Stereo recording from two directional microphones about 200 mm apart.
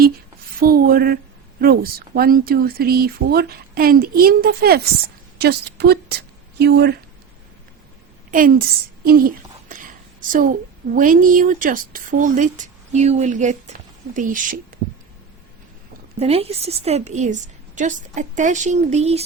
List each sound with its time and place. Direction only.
0.6 s a sound: 45° right (ahead or behind)
1.6 s a woman's voice: 50° right (ahead or behind)
8.3 s speech: 45° right (ahead or behind)
9.6 s a woman's voice: 40° right (ahead or behind)
16.1 s a woman's voice: 30° right (ahead or behind)